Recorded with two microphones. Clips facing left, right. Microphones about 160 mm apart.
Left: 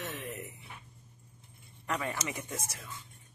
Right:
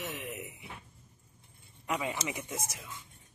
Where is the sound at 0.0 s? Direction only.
15° right (ahead or behind).